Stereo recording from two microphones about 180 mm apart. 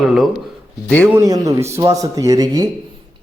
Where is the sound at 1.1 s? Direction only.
20° right (ahead or behind).